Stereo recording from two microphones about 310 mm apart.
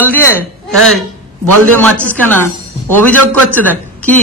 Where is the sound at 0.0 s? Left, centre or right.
Centre.